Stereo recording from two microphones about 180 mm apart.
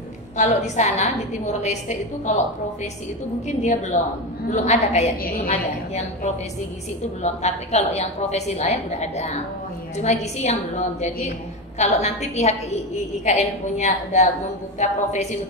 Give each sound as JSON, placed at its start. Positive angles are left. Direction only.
{"t": 0.4, "sound": "a woman's voice", "side_deg": 40}